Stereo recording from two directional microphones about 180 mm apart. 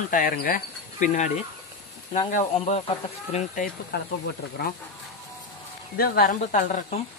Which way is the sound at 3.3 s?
50° left (ahead or behind).